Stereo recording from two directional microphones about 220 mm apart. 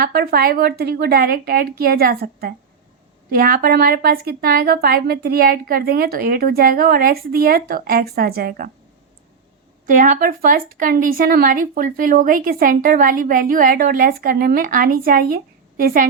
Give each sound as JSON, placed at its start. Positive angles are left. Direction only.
{"t": 0.0, "sound": "a woman's voice", "side_deg": -45}
{"t": 9.8, "sound": "speech", "side_deg": -35}